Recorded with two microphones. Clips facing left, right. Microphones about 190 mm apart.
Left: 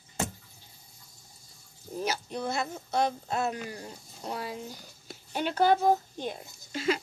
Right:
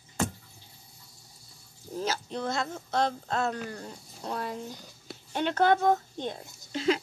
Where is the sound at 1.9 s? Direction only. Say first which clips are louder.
Even; 15° left (ahead or behind).